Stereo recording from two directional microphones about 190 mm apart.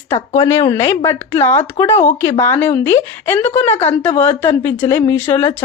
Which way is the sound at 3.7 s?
35° left (ahead or behind).